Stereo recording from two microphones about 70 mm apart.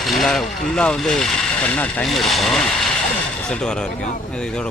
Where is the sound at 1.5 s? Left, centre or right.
Centre.